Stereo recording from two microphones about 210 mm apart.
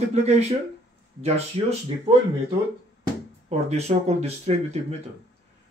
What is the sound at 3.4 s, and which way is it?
Speech, 30° right (ahead or behind).